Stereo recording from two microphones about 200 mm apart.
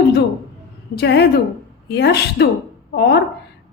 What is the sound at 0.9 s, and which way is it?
A woman's voice, 55° left (ahead or behind).